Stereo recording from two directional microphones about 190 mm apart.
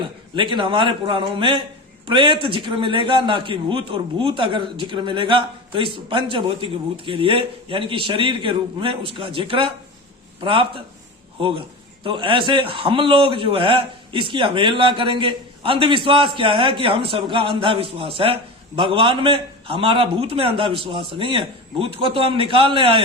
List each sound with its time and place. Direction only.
0.3 s a man's voice: 25° right (ahead or behind)